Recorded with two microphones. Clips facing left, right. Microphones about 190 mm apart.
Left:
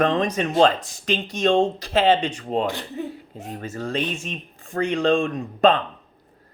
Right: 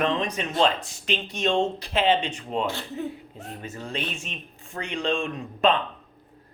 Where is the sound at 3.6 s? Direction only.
40° left (ahead or behind).